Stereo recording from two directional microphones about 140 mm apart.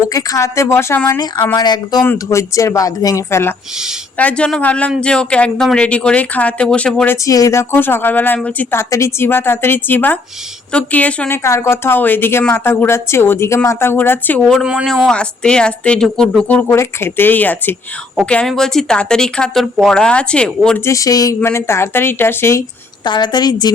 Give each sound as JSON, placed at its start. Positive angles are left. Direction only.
{"t": 0.1, "sound": "speech", "side_deg": 25}
{"t": 1.5, "sound": "speech", "side_deg": 30}
{"t": 7.3, "sound": "speech", "side_deg": 25}
{"t": 14.4, "sound": "speech", "side_deg": 0}
{"t": 20.8, "sound": "speech", "side_deg": 25}
{"t": 23.0, "sound": "speech", "side_deg": 30}